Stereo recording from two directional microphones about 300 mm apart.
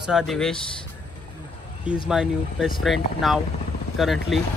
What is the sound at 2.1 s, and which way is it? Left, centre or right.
Speech, centre.